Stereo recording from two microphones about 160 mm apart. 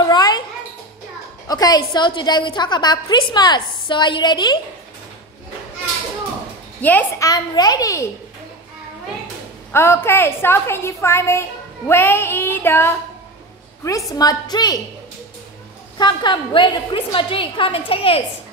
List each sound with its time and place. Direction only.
0.0 s a sound: 25° left (ahead or behind)
1.5 s a woman's voice: 25° left (ahead or behind)
6.8 s a woman's voice: 10° left (ahead or behind)
7.2 s a woman's voice: 25° left (ahead or behind)
9.7 s a woman's voice: 15° left (ahead or behind)
16.0 s a woman's voice: 30° left (ahead or behind)